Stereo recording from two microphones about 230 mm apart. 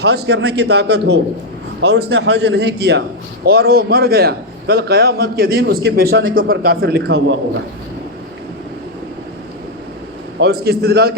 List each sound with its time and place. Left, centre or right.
0.0 s a man's voice: right
10.4 s a man's voice: right